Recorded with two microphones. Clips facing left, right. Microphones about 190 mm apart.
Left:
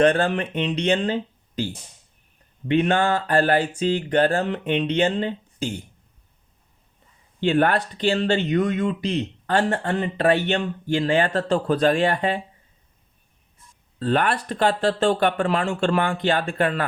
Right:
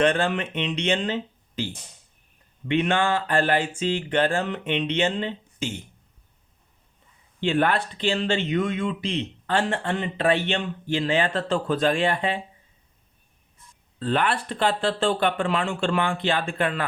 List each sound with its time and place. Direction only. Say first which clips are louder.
0.0 s a sound: left 3 dB; 40° left (ahead or behind)
7.4 s speech: left 3 dB; 45° left (ahead or behind)
14.0 s speech: left 2 dB; 45° left (ahead or behind)